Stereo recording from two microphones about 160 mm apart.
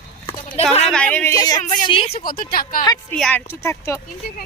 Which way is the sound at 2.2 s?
65° left (ahead or behind).